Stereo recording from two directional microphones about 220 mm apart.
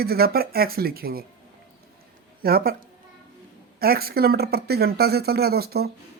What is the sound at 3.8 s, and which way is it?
Speech, 45° right (ahead or behind).